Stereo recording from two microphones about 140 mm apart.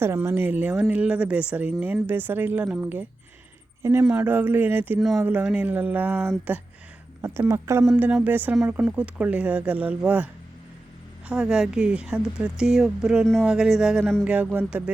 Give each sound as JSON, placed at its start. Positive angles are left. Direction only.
{"t": 0.0, "sound": "speech", "side_deg": -15}
{"t": 4.9, "sound": "a woman's voice", "side_deg": 0}
{"t": 11.3, "sound": "a woman's voice", "side_deg": -5}
{"t": 14.3, "sound": "speech", "side_deg": -10}